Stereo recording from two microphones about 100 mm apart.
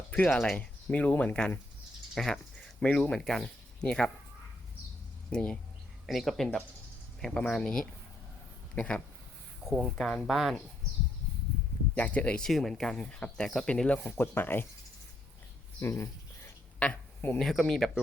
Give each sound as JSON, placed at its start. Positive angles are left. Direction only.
{"t": 0.1, "sound": "speech", "side_deg": 10}
{"t": 2.1, "sound": "typing", "side_deg": 5}
{"t": 2.8, "sound": "speech", "side_deg": 5}
{"t": 5.3, "sound": "speech", "side_deg": 10}
{"t": 9.6, "sound": "speech", "side_deg": 0}
{"t": 11.9, "sound": "speech", "side_deg": 15}
{"t": 12.5, "sound": "speech", "side_deg": 0}
{"t": 15.8, "sound": "a sound", "side_deg": 25}
{"t": 17.4, "sound": "speech", "side_deg": 5}